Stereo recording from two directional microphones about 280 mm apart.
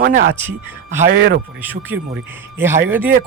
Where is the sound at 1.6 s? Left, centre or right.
Centre.